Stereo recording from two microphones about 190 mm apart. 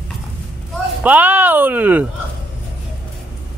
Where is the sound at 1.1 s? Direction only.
10° right (ahead or behind).